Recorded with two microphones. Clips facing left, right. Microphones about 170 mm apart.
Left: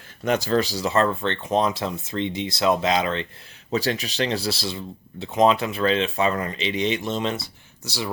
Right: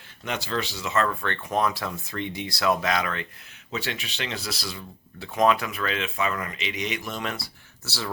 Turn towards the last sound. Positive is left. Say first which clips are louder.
# left 3 dB
turn(degrees=15)  # may be behind; listen again after turning